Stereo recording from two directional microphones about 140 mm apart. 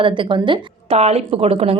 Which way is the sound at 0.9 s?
50° right (ahead or behind).